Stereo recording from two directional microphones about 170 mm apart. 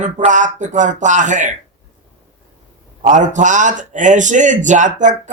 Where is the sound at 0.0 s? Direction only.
45° right (ahead or behind).